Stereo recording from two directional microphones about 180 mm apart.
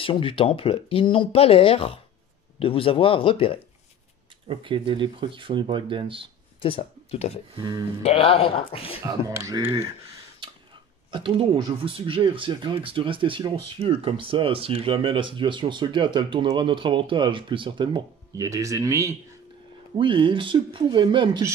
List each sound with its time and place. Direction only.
0.0 s speech: 30° left (ahead or behind)
4.5 s speech: 30° right (ahead or behind)
6.6 s speech: 30° left (ahead or behind)
7.5 s speech: 25° right (ahead or behind)
8.0 s speech: 35° left (ahead or behind)
9.0 s speech: 20° right (ahead or behind)
11.1 s speech: 30° right (ahead or behind)
20.0 s speech: 25° right (ahead or behind)